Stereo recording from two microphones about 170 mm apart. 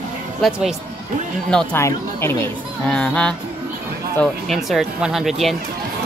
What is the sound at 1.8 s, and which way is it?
Speech, 15° left (ahead or behind).